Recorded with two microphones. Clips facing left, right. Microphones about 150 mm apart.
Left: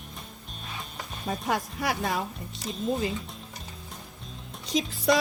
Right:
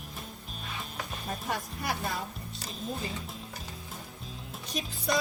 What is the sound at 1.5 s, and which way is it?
Speech, 90° left.